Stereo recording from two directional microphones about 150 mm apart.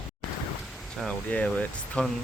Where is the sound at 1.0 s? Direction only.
10° left (ahead or behind).